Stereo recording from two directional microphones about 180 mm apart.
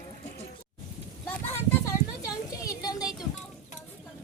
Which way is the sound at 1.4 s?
15° left (ahead or behind).